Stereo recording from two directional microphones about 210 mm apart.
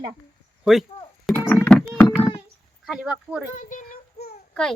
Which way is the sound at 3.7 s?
50° left (ahead or behind).